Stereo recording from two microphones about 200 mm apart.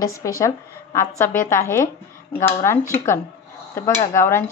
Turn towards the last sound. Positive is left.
turn(degrees=15)  # may be behind; listen again after turning